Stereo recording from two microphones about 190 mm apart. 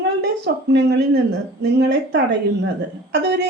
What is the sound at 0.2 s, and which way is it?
A woman's voice, 60° right (ahead or behind).